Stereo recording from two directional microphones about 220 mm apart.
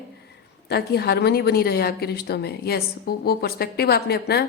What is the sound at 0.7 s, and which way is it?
A woman's voice, 45° left (ahead or behind).